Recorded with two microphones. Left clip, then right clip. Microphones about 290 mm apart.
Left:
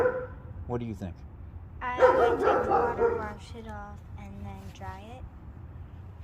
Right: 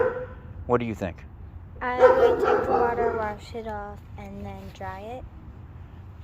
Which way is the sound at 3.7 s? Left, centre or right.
Right.